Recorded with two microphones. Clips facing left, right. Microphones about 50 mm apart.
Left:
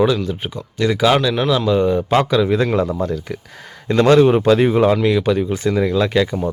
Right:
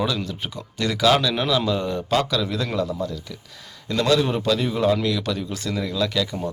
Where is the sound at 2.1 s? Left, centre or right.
Left.